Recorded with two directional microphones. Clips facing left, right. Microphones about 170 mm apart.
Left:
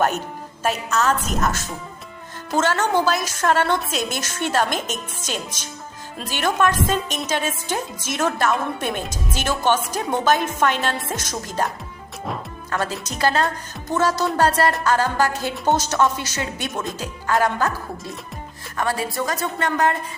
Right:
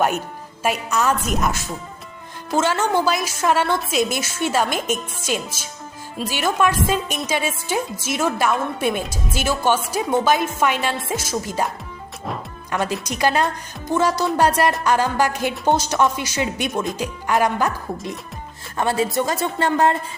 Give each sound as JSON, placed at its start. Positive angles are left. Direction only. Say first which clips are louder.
{"t": 0.6, "sound": "a woman's voice", "louder": "right 1 dB", "side_deg": -10}
{"t": 12.7, "sound": "a woman's voice", "louder": "right 2 dB", "side_deg": -15}
{"t": 18.8, "sound": "a woman's voice", "louder": "right 4 dB", "side_deg": -25}